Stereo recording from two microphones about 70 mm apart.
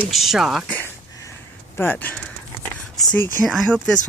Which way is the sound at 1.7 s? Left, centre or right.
Left.